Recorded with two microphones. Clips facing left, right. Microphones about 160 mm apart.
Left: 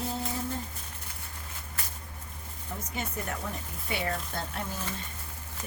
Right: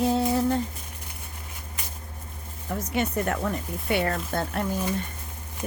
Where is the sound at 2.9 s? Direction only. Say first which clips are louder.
Right 10 dB; 70° right (ahead or behind).